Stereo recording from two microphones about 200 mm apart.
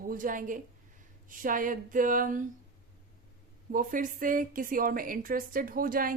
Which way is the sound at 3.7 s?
40° right (ahead or behind).